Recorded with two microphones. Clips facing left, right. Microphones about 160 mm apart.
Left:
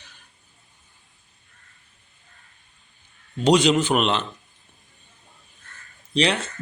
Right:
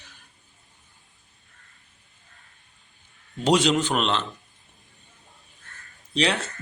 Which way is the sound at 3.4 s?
Centre (ahead or behind).